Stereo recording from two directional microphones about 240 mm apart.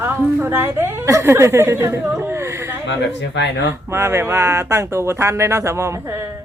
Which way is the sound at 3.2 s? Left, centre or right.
Left.